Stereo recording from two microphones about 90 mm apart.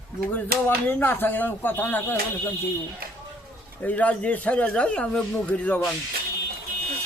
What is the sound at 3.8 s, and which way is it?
Speech, 15° left (ahead or behind).